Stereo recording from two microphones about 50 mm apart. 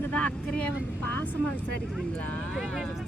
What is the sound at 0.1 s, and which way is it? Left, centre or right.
Speech, left.